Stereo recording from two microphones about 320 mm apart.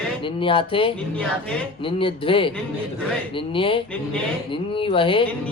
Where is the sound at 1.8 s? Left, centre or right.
Centre.